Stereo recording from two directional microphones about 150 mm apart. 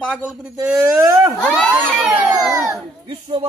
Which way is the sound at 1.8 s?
10° right (ahead or behind).